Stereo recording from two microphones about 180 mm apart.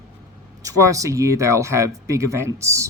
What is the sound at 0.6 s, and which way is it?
Speech, 20° right (ahead or behind).